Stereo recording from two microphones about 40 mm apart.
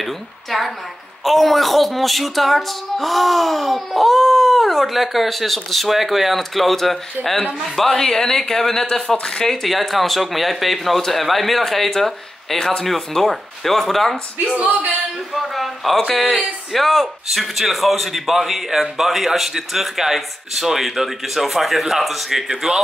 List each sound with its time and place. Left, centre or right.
0.0 s a man's voice: centre
7.2 s speech: right
7.6 s a man's voice: centre
7.9 s a woman's voice: centre
9.6 s a man's voice: centre
15.3 s a man's voice: centre